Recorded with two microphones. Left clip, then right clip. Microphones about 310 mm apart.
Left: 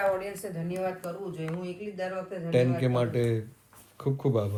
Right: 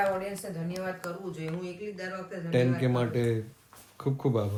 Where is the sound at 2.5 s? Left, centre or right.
Centre.